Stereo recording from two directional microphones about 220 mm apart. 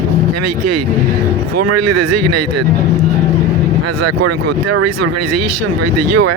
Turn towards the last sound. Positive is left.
turn(degrees=-90)